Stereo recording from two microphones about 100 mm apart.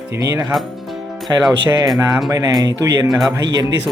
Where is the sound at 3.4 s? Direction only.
45° right (ahead or behind).